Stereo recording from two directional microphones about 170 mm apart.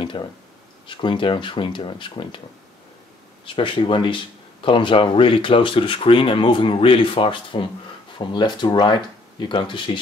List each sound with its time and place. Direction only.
0.0 s speech: 30° left (ahead or behind)
3.4 s speech: 30° left (ahead or behind)